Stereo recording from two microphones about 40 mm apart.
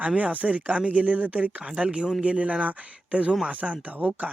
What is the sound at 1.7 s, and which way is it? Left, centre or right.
Speech, right.